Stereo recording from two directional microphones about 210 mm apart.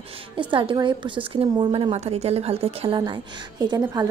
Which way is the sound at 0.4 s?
25° right (ahead or behind).